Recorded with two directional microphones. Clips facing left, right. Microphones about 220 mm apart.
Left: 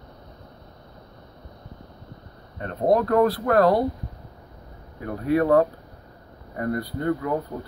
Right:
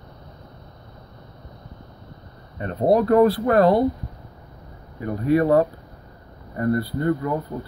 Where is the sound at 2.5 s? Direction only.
10° right (ahead or behind).